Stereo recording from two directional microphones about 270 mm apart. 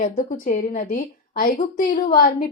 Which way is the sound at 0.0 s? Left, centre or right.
Left.